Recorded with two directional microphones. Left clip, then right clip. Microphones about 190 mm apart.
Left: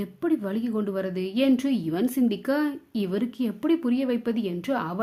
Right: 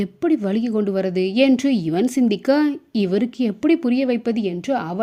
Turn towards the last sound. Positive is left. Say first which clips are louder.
# right 5 dB
turn(degrees=-20)  # may be behind; listen again after turning